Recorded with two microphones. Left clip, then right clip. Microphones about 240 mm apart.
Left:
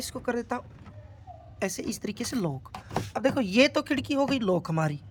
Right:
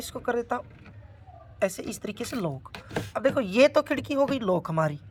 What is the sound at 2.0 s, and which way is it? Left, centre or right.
Speech, centre.